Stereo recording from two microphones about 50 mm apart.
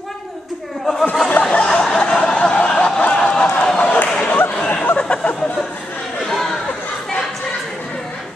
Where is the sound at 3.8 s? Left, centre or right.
Left.